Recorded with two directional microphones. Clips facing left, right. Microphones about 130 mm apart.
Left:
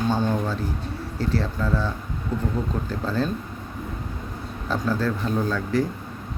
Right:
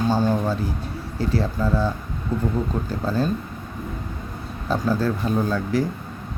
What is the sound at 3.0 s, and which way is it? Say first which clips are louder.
Speech: right 2 dB; 10° right (ahead or behind).